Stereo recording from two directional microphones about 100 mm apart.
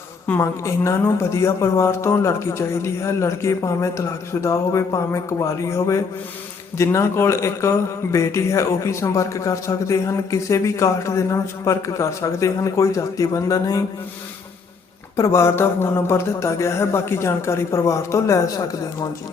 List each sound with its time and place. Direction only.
0.3 s a woman's voice: 30° left (ahead or behind)
15.1 s a woman's voice: 30° left (ahead or behind)